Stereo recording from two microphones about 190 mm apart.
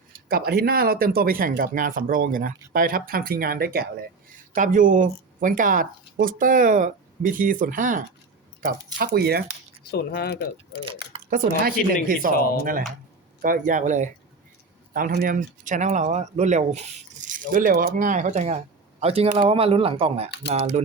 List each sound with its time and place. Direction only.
0.3 s speech: 50° right (ahead or behind)
9.9 s speech: 55° left (ahead or behind)
11.3 s speech: 50° right (ahead or behind)
12.3 s speech: 50° left (ahead or behind)
13.4 s speech: 45° right (ahead or behind)